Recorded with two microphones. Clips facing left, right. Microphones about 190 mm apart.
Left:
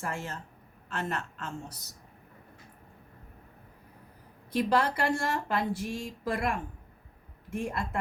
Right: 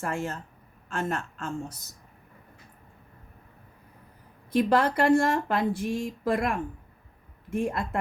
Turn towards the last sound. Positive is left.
turn(degrees=-55)  # may be behind; listen again after turning